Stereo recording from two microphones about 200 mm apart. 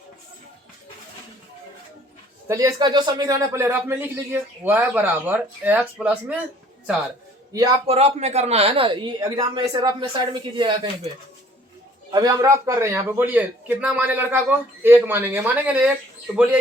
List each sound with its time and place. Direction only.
2.5 s speech: 15° right (ahead or behind)
7.9 s speech: 30° right (ahead or behind)
12.1 s speech: 20° right (ahead or behind)